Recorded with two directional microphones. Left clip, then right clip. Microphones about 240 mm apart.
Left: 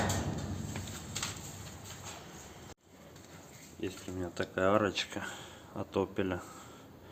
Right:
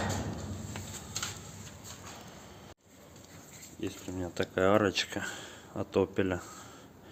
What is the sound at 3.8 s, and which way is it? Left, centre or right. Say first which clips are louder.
Speech: right 1 dB; right.